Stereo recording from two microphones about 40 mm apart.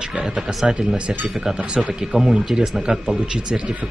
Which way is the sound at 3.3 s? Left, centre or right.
Right.